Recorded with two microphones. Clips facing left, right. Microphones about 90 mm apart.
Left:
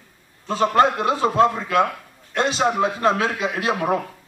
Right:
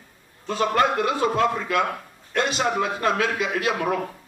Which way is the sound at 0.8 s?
30° left (ahead or behind).